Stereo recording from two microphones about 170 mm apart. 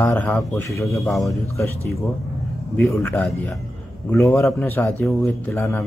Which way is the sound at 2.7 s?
10° left (ahead or behind).